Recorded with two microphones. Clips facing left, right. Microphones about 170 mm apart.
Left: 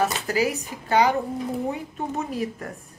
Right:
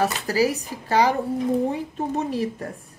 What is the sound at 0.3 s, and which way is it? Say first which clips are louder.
A woman's voice: right 2 dB; 35° right (ahead or behind).